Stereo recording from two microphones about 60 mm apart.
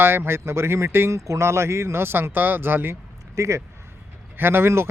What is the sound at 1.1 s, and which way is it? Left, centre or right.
Speech, right.